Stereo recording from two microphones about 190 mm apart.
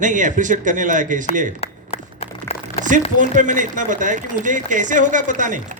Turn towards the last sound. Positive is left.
turn(degrees=-40)  # may be behind; listen again after turning